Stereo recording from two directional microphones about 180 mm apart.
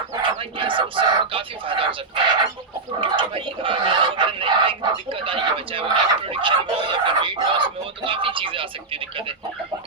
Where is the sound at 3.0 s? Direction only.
30° right (ahead or behind).